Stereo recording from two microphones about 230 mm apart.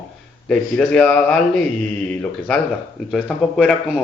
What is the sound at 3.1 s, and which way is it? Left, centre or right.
Speech, centre.